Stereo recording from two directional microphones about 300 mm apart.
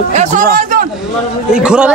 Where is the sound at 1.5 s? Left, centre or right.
Centre.